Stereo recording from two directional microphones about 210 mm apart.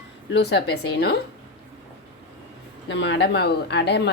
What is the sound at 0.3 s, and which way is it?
Speech, 55° left (ahead or behind).